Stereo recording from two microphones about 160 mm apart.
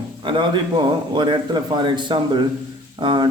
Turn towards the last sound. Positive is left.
turn(degrees=-30)  # may be behind; listen again after turning